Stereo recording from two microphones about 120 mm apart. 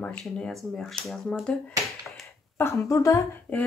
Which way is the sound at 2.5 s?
20° left (ahead or behind).